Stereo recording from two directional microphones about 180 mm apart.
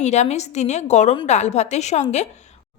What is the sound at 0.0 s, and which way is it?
A woman's voice, 40° left (ahead or behind).